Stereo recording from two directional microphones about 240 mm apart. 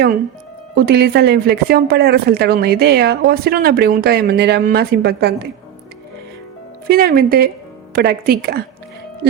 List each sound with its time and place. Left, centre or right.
0.8 s speech: right
6.8 s speech: right